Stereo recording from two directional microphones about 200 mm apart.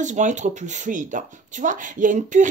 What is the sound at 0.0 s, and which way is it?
Speech, 35° right (ahead or behind).